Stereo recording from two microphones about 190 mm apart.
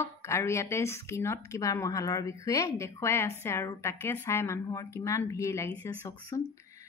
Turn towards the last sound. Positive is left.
turn(degrees=15)  # may be behind; listen again after turning